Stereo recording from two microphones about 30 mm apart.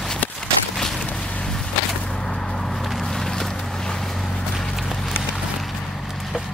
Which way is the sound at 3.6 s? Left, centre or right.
Centre.